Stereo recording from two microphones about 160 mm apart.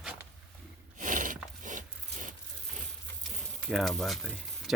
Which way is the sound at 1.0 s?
55° right (ahead or behind).